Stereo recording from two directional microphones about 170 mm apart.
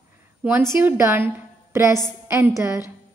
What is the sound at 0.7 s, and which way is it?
A woman's voice, 15° right (ahead or behind).